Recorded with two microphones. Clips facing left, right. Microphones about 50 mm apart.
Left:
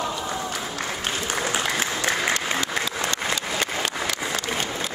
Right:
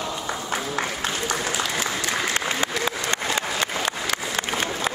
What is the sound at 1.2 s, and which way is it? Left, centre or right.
Applause, left.